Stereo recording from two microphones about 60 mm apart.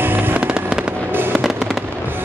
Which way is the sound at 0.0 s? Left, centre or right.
Right.